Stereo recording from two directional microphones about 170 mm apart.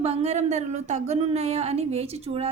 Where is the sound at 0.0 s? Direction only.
35° right (ahead or behind).